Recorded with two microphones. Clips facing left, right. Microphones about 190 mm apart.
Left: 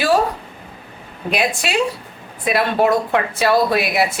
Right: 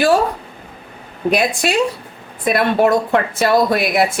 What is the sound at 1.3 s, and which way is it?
Speech, 45° right (ahead or behind).